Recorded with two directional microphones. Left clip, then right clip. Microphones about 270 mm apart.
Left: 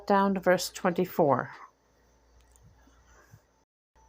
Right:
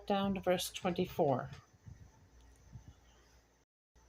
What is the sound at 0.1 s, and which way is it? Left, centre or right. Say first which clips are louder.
Speech: left 10 dB; centre.